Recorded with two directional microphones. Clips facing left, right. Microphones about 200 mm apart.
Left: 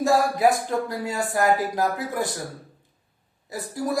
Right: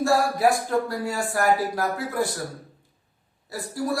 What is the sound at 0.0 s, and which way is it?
Speech, 20° left (ahead or behind).